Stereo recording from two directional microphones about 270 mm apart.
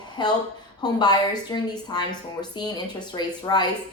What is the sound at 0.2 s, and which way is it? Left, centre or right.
A woman's voice, centre.